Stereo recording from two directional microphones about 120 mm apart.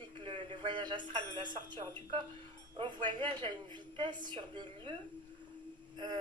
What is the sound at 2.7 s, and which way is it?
Speech, 40° right (ahead or behind).